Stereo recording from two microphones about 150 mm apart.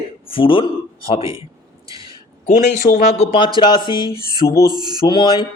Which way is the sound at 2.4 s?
55° left (ahead or behind).